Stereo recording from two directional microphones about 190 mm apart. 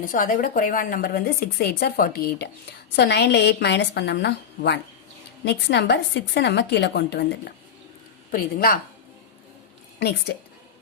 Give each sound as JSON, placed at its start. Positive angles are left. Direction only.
{"t": 0.0, "sound": "a woman's voice", "side_deg": 45}
{"t": 8.3, "sound": "speech", "side_deg": 50}
{"t": 10.0, "sound": "a woman's voice", "side_deg": 60}